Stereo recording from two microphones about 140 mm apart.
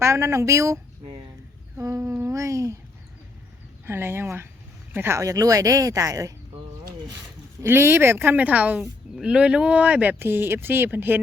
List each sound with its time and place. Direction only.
0.0 s speech: 20° right (ahead or behind)
1.8 s a sound: 20° right (ahead or behind)
3.8 s speech: 15° right (ahead or behind)
7.6 s speech: 15° right (ahead or behind)